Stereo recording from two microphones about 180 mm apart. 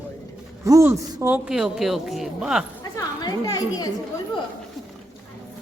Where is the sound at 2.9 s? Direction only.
20° left (ahead or behind).